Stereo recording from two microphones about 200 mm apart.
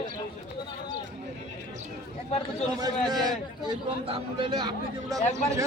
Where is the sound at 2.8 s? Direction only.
20° right (ahead or behind).